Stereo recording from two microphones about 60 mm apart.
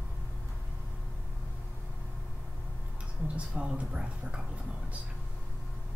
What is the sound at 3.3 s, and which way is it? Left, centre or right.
Speech, centre.